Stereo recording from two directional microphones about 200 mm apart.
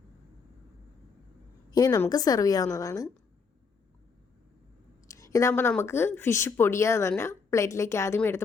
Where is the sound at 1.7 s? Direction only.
20° left (ahead or behind).